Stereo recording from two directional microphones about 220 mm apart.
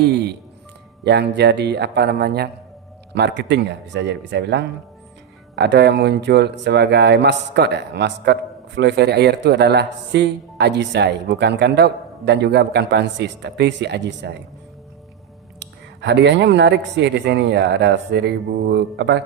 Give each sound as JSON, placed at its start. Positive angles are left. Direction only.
{"t": 0.0, "sound": "speech", "side_deg": -50}
{"t": 16.0, "sound": "speech", "side_deg": -50}